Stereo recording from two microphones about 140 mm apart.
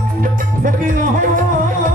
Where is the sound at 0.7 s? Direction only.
75° right (ahead or behind).